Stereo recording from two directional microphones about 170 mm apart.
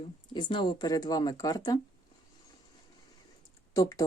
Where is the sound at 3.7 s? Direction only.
20° left (ahead or behind).